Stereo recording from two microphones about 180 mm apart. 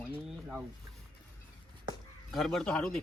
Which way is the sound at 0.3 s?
10° right (ahead or behind).